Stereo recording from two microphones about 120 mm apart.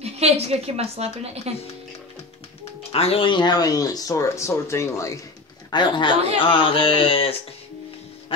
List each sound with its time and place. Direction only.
0.0 s a woman's voice: 60° right (ahead or behind)
2.9 s speech: 55° left (ahead or behind); by 5.2 s 25° left (ahead or behind)
5.7 s a man's voice: 40° left (ahead or behind)
8.3 s music: 45° left (ahead or behind)